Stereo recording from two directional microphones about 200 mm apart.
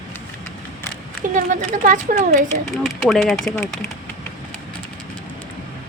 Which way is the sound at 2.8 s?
Centre (ahead or behind).